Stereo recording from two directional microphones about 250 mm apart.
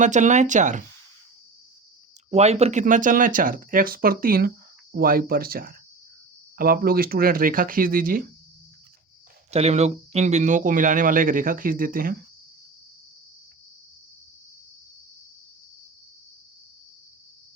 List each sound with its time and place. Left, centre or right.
0.0 s speech: right
2.3 s speech: right
9.5 s speech: right